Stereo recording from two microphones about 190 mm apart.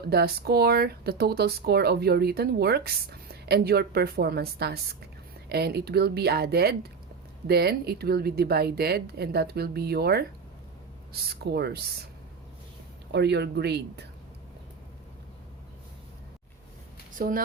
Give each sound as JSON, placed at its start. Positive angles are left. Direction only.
{"t": 0.1, "sound": "speech", "side_deg": -55}
{"t": 13.1, "sound": "speech", "side_deg": -60}
{"t": 17.2, "sound": "a woman's voice", "side_deg": -45}